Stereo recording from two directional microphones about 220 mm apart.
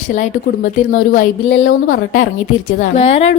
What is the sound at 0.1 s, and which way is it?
Speech, 35° left (ahead or behind).